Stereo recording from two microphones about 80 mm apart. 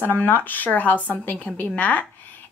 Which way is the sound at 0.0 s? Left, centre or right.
Left.